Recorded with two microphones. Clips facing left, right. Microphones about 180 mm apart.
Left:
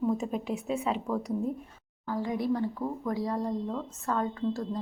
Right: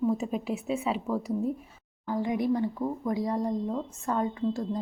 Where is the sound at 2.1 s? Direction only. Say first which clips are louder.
Right 2 dB; 15° right (ahead or behind).